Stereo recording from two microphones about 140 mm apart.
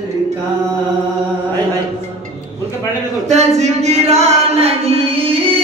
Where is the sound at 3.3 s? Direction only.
50° right (ahead or behind).